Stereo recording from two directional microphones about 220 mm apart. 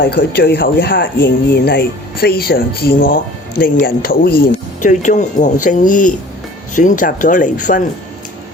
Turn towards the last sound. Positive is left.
turn(degrees=35)  # may be behind; listen again after turning